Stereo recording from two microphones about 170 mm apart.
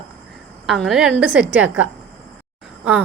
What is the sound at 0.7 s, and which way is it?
Speech, centre (ahead or behind).